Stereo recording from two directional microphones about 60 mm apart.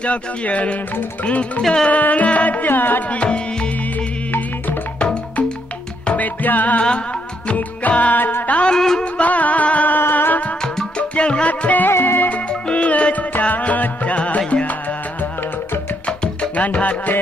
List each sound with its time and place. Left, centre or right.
0.0 s music: left
1.9 s music: left
4.9 s music: centre
8.7 s music: centre
9.0 s music: left
9.9 s music: left
10.6 s music: centre
11.9 s music: left
12.3 s music: left
16.1 s music: left